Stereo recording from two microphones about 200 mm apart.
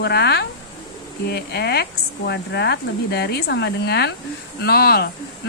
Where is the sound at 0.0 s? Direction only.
55° left (ahead or behind).